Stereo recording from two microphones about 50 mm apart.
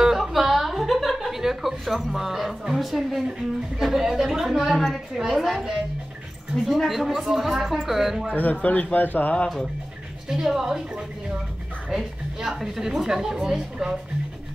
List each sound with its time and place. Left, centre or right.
0.2 s a sound: centre
3.3 s a woman's voice: centre
8.6 s speech: left
10.2 s a woman's voice: centre
11.9 s a woman's voice: centre